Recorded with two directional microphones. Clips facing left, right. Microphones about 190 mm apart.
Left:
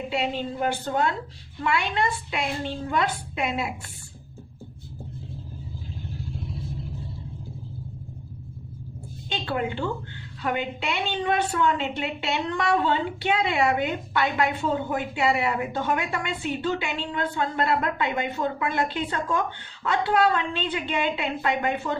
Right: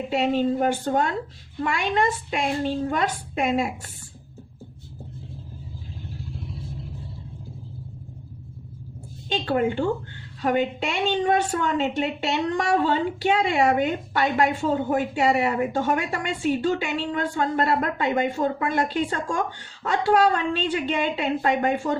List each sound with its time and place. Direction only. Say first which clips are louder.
0.1 s a woman's voice: right 8 dB; 45° right (ahead or behind)
9.3 s a woman's voice: right 5 dB; 45° right (ahead or behind)